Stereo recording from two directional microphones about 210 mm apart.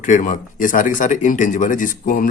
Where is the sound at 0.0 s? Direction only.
40° left (ahead or behind).